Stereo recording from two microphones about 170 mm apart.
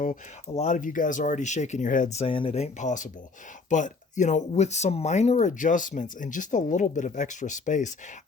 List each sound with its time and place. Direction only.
0.0 s speech: 45° left (ahead or behind)